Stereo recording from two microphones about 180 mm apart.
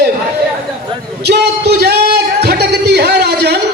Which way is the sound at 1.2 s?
65° right (ahead or behind).